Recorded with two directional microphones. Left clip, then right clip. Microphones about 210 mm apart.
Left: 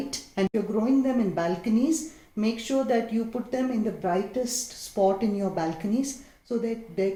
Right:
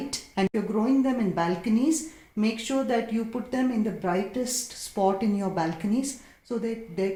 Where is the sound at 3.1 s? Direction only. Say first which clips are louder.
Left 1 dB; 50° right (ahead or behind).